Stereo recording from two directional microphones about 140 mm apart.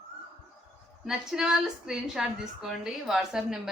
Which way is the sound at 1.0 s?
5° right (ahead or behind).